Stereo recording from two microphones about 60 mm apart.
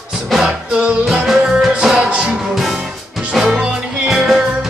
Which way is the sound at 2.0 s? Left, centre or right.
Centre.